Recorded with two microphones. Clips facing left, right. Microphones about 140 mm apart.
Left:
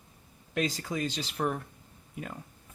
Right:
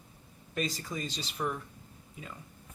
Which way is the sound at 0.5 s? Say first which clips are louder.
Left 4 dB; 80° left.